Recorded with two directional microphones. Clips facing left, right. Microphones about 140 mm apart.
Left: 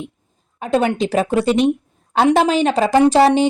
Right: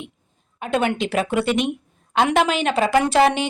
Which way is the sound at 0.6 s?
35° left (ahead or behind).